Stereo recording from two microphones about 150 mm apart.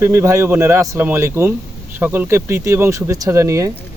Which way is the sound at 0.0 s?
15° right (ahead or behind).